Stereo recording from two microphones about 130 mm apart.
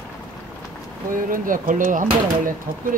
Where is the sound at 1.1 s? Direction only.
90° right.